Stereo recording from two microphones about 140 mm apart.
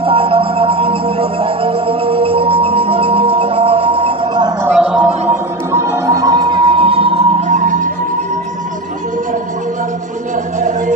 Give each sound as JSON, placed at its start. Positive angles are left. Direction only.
{"t": 0.0, "sound": "music", "side_deg": -40}
{"t": 4.7, "sound": "a sound", "side_deg": -5}
{"t": 5.3, "sound": "music", "side_deg": -20}
{"t": 7.5, "sound": "music", "side_deg": -65}